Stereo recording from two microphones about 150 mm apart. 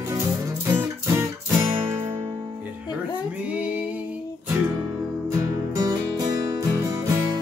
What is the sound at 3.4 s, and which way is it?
Music, 10° right (ahead or behind).